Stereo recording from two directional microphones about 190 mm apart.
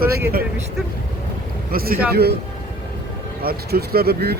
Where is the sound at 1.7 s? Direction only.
50° right (ahead or behind).